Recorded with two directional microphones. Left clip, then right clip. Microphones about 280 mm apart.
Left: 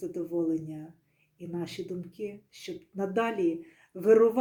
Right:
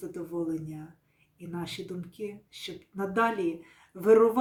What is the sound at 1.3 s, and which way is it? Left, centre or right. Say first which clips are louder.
Speech: left 1 dB; centre.